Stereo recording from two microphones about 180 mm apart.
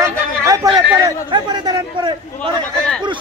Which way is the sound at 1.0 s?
25° right (ahead or behind).